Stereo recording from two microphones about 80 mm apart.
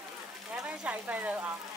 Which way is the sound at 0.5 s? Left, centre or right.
Centre.